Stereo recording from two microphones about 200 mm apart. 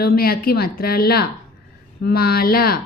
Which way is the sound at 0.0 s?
50° left (ahead or behind).